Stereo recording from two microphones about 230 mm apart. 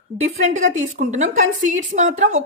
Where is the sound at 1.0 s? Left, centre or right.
Right.